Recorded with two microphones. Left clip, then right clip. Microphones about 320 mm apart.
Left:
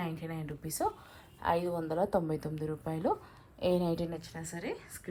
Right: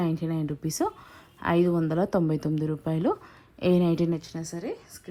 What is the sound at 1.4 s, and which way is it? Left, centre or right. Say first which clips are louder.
Speech: right 7 dB; left.